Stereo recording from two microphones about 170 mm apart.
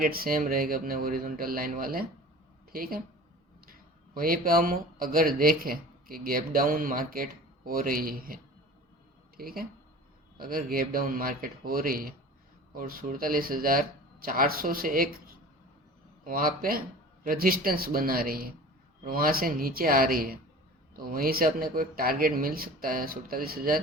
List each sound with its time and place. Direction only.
0.0 s speech: 60° right (ahead or behind)
9.4 s speech: 60° right (ahead or behind)
16.2 s speech: 55° right (ahead or behind)